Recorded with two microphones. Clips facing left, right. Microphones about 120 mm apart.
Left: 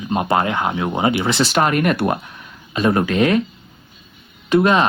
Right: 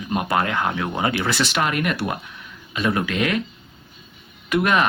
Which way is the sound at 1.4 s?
40° left (ahead or behind).